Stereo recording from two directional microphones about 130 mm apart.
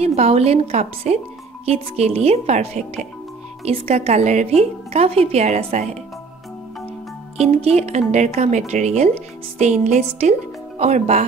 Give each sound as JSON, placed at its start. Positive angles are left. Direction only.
{"t": 0.0, "sound": "a woman's voice", "side_deg": -55}
{"t": 7.3, "sound": "a woman's voice", "side_deg": -55}